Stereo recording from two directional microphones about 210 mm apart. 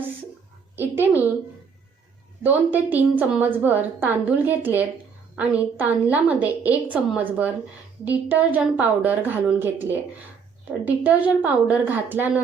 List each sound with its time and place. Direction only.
0.8 s a woman's voice: 10° right (ahead or behind)
2.4 s a woman's voice: 10° right (ahead or behind)